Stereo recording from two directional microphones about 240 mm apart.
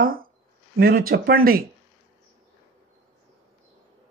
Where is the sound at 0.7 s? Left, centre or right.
Right.